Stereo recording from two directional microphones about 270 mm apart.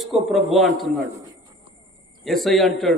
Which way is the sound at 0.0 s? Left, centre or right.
Centre.